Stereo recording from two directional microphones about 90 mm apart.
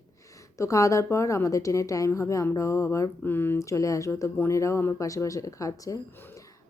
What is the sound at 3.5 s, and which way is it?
Speech, 35° left (ahead or behind).